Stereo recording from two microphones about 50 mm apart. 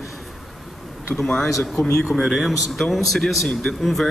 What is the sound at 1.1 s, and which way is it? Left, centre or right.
A man's voice, centre.